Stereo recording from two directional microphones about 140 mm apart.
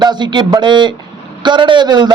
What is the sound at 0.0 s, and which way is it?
A man's voice, 30° right (ahead or behind).